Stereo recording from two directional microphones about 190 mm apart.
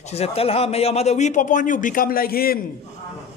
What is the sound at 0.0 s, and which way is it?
A man's voice, 35° left (ahead or behind).